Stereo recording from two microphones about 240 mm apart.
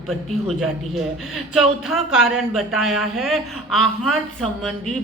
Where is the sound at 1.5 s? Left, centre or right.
Centre.